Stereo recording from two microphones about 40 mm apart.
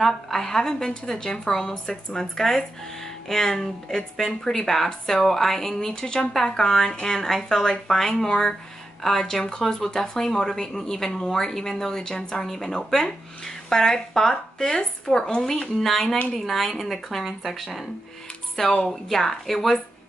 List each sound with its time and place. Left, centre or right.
0.0 s a woman's voice: centre
18.9 s a woman's voice: centre